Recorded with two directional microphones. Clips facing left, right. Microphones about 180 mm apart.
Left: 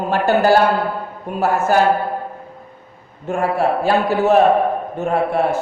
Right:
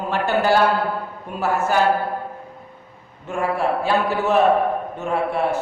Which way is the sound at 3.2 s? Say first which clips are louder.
Left 4 dB; 40° left (ahead or behind).